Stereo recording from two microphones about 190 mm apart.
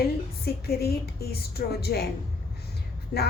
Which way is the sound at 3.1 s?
55° left (ahead or behind).